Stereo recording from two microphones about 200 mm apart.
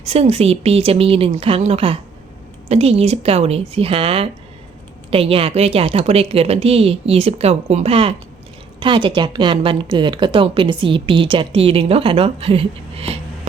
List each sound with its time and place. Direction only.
0.0 s a woman's voice: 30° right (ahead or behind)